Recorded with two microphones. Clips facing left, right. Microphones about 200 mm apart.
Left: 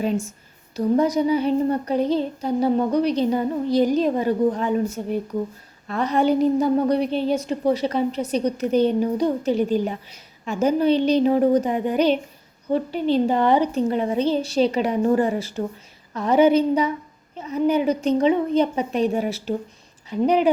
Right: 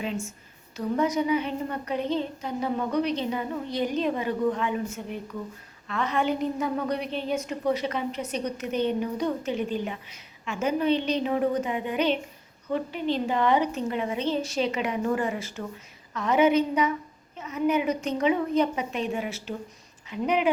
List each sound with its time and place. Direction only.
0.0 s a woman's voice: 40° left (ahead or behind)